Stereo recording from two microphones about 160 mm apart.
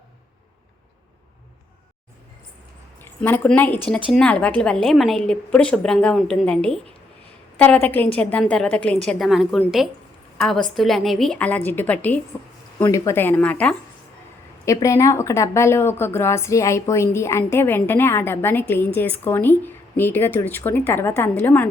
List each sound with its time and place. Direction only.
3.2 s a woman's voice: 10° left (ahead or behind)
14.6 s speech: 20° left (ahead or behind)